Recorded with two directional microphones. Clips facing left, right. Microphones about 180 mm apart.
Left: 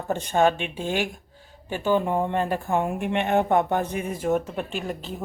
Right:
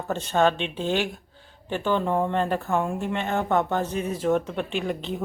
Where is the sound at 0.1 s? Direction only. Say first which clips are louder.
Left 1 dB; 15° left (ahead or behind).